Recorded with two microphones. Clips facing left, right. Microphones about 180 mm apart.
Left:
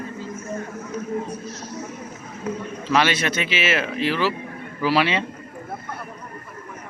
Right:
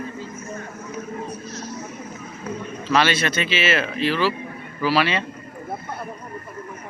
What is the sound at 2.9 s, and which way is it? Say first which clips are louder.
Speech: even; 15° left (ahead or behind).